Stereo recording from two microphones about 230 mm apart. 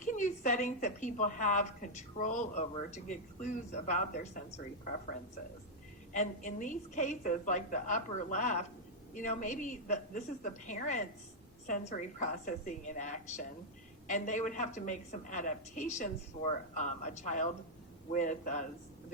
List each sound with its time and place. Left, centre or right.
0.0 s a woman's voice: left
6.1 s a woman's voice: left